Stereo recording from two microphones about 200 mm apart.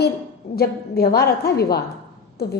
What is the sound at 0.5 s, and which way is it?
A woman's voice, 50° left (ahead or behind).